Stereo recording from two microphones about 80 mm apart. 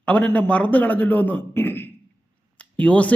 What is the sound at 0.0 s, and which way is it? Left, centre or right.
A man's voice, centre.